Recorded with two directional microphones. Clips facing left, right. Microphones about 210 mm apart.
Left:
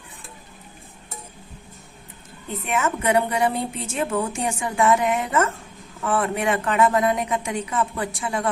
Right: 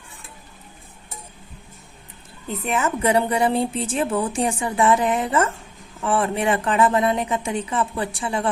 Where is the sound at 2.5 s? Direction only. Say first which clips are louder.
Right 1 dB; 35° right (ahead or behind).